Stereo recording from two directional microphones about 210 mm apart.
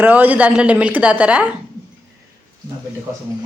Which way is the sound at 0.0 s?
10° right (ahead or behind).